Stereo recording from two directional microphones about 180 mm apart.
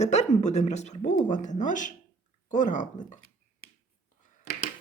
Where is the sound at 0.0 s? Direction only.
40° left (ahead or behind).